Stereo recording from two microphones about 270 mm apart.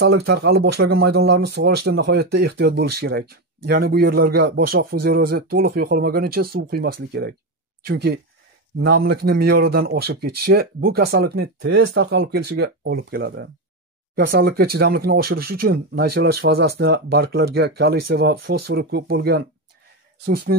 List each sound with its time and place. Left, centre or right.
0.0 s speech: right